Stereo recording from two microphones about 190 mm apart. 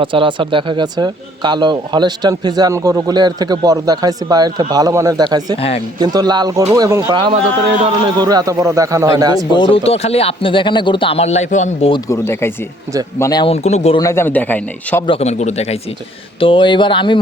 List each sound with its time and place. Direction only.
0.0 s a man's voice: 25° right (ahead or behind)
5.5 s speech: 30° left (ahead or behind)
6.0 s a man's voice: 20° right (ahead or behind)
9.5 s speech: 25° left (ahead or behind)
11.9 s a man's voice: 20° left (ahead or behind)
14.0 s a man's voice: 15° left (ahead or behind)
15.0 s speech: 30° left (ahead or behind)